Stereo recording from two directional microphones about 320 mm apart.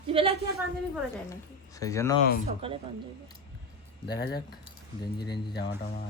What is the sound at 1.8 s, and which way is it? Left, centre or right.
Speech, centre.